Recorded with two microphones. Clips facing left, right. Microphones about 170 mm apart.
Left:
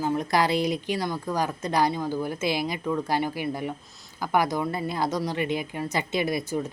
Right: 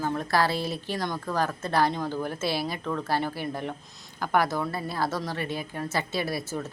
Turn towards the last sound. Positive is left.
turn(degrees=15)  # may be behind; listen again after turning